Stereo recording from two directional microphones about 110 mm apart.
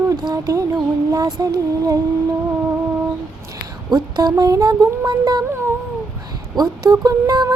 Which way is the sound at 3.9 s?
35° right (ahead or behind).